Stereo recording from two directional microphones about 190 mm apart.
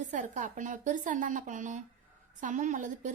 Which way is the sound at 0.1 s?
45° right (ahead or behind).